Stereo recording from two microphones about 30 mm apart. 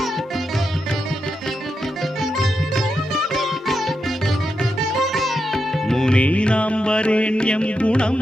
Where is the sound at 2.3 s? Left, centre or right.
Centre.